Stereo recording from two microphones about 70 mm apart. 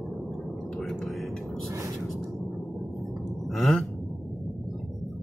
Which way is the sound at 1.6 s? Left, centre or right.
Right.